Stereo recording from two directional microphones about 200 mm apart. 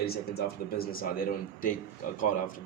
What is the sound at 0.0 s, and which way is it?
A man's voice, 50° left (ahead or behind).